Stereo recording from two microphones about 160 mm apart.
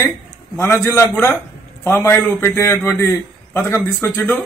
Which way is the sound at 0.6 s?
15° left (ahead or behind).